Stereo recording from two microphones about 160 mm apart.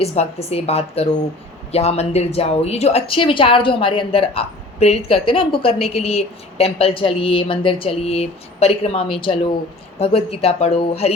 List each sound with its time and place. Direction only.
0.0 s a woman's voice: 40° left (ahead or behind)